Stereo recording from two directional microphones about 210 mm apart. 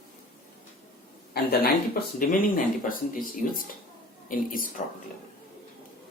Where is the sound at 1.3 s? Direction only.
50° left (ahead or behind).